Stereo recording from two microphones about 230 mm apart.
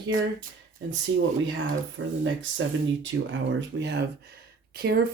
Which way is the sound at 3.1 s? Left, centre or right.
Right.